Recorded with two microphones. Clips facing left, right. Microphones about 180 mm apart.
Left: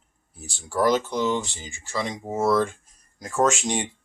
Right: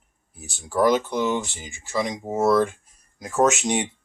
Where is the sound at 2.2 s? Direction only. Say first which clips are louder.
Right 2 dB; centre (ahead or behind).